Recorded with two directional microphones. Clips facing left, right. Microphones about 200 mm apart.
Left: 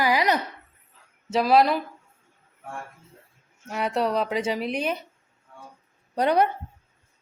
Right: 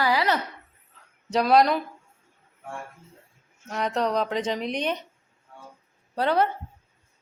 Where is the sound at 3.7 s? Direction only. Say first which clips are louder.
Left 1 dB; 10° left (ahead or behind).